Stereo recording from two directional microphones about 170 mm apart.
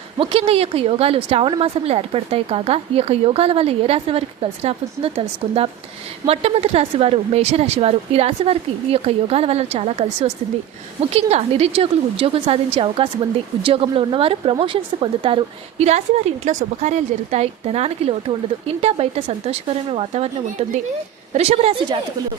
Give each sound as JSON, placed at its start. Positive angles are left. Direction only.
{"t": 0.2, "sound": "a woman's voice", "side_deg": -35}